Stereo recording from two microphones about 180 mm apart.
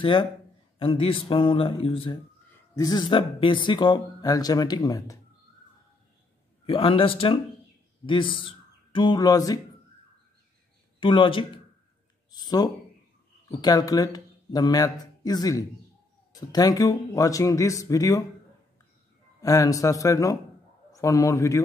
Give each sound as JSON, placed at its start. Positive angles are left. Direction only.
{"t": 0.0, "sound": "speech", "side_deg": 30}
{"t": 6.6, "sound": "a man's voice", "side_deg": 30}
{"t": 11.0, "sound": "speech", "side_deg": 30}
{"t": 12.3, "sound": "a sound", "side_deg": 20}
{"t": 13.5, "sound": "speech", "side_deg": 20}
{"t": 19.4, "sound": "a man's voice", "side_deg": 20}